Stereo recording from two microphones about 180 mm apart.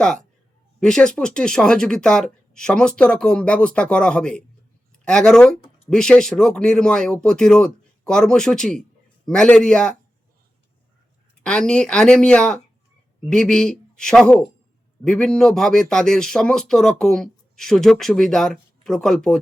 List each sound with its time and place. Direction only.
0.0 s a man's voice: 5° left (ahead or behind)
11.4 s a man's voice: 5° left (ahead or behind)